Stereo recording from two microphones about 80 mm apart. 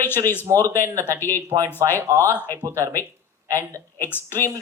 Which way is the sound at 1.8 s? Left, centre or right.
Right.